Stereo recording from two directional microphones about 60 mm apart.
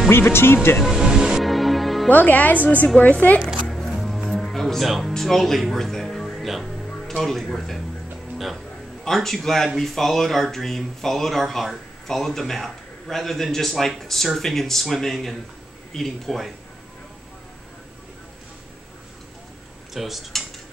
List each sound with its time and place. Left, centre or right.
0.1 s speech: left
0.7 s music: centre
2.0 s a woman's voice: left
3.7 s music: centre
5.1 s speech: centre
9.0 s speech: centre
19.9 s speech: centre